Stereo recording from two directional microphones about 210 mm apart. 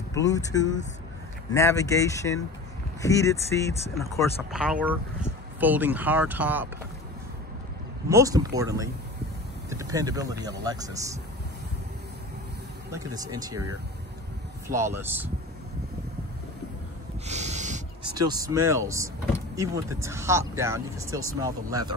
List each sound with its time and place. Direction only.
0.1 s speech: 15° left (ahead or behind)
4.2 s speech: 5° right (ahead or behind)
8.1 s speech: 15° right (ahead or behind)
12.9 s speech: 15° right (ahead or behind)
14.7 s speech: 10° right (ahead or behind)
17.3 s snort: 35° right (ahead or behind)
18.0 s speech: 20° right (ahead or behind)